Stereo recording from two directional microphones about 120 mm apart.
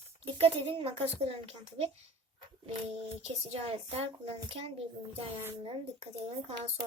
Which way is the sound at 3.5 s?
55° right (ahead or behind).